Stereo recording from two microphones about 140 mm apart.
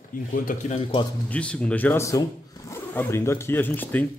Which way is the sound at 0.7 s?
40° left (ahead or behind).